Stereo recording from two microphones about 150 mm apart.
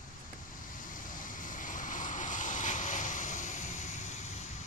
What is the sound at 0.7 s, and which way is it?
Vehicle, 60° left (ahead or behind).